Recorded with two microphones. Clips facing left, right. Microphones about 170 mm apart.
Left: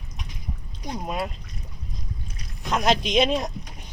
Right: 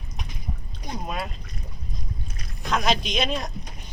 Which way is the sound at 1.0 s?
10° left (ahead or behind).